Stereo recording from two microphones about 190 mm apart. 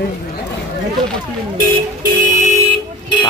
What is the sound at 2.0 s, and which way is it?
Music, 40° right (ahead or behind).